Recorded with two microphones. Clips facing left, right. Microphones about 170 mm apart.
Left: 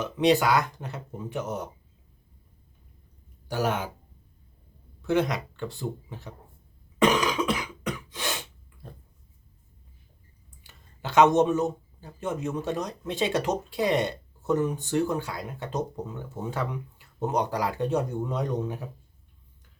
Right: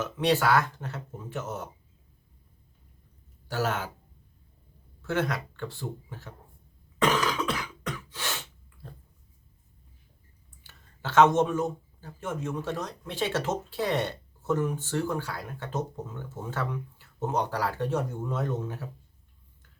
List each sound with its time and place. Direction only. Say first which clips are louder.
0.0 s speech: left 3 dB; 15° left (ahead or behind)
3.5 s speech: left 2 dB; 15° left (ahead or behind)
5.0 s speech: left 4 dB; 15° left (ahead or behind)
7.0 s cough: left 3 dB; 15° left (ahead or behind)
10.6 s speech: left 1 dB; 15° left (ahead or behind)